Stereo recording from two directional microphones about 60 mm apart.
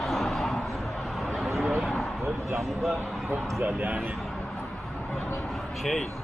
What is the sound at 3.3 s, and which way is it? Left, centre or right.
Speech, right.